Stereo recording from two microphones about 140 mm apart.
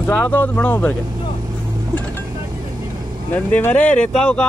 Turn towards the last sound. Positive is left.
turn(degrees=5)  # may be behind; listen again after turning